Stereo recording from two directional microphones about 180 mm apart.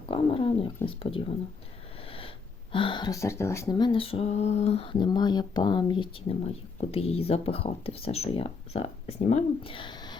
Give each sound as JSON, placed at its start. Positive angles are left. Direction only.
{"t": 0.1, "sound": "speech", "side_deg": 30}
{"t": 2.0, "sound": "sniff", "side_deg": 30}
{"t": 2.7, "sound": "speech", "side_deg": 25}